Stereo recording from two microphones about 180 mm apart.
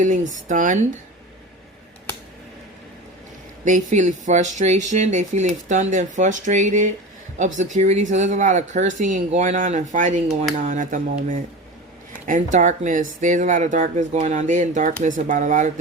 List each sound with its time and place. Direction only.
0.0 s speech: 45° right (ahead or behind)
3.6 s a man's voice: 45° right (ahead or behind)